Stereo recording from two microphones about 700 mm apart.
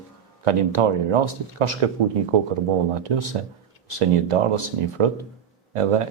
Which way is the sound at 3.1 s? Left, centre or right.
Right.